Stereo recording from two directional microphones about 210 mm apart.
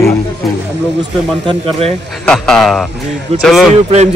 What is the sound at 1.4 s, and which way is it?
Speech, 30° right (ahead or behind).